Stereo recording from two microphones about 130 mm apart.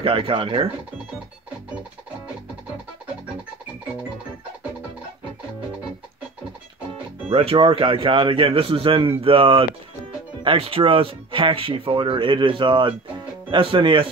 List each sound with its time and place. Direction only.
0.0 s speech: 45° right (ahead or behind)
7.2 s speech: 45° right (ahead or behind)